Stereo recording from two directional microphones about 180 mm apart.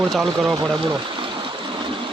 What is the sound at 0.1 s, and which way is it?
Speech, centre (ahead or behind).